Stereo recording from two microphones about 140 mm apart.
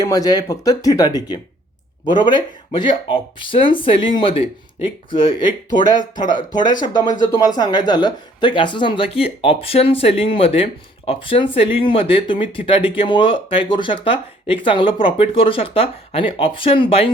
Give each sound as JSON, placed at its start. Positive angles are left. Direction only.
{"t": 0.0, "sound": "speech", "side_deg": 25}